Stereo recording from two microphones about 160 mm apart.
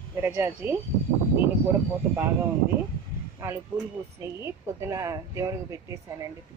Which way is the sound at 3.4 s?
15° right (ahead or behind).